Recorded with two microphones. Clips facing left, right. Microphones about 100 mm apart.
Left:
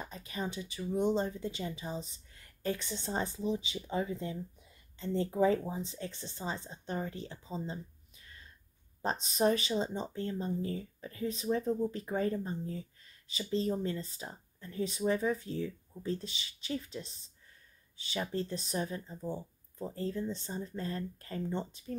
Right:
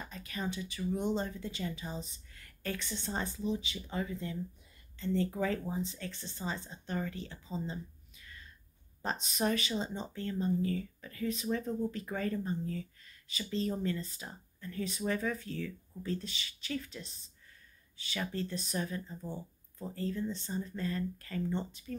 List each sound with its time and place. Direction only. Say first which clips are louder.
0.0 s speech: even; 20° left (ahead or behind)
2.8 s a woman's voice: left 2 dB; 30° left (ahead or behind)